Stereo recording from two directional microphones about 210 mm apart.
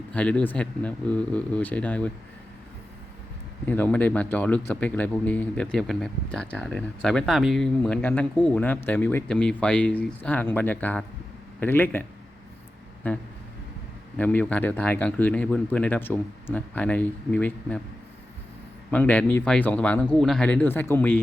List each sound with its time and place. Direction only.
0.1 s speech: 5° left (ahead or behind)
3.7 s speech: 10° left (ahead or behind)
13.0 s speech: 10° left (ahead or behind)
18.9 s speech: 5° left (ahead or behind)